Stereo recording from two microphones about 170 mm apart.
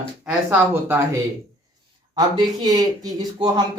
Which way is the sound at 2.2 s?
25° right (ahead or behind).